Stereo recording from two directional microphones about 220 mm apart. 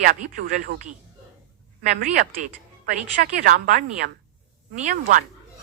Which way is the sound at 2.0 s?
35° right (ahead or behind).